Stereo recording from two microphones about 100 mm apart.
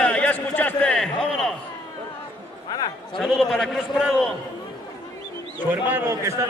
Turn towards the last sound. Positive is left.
turn(degrees=-30)  # may be behind; listen again after turning